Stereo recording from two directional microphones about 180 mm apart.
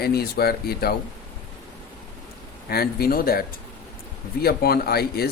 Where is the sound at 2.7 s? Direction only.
60° left (ahead or behind).